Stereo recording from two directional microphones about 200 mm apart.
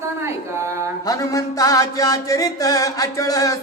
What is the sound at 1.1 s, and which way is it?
Music, 15° left (ahead or behind).